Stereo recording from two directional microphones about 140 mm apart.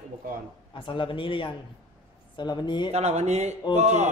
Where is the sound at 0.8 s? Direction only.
35° left (ahead or behind).